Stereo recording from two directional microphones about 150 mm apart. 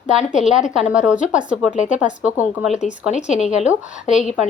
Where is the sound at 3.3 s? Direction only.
50° left (ahead or behind).